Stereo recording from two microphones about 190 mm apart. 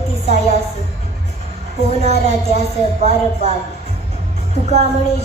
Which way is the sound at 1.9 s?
35° right (ahead or behind).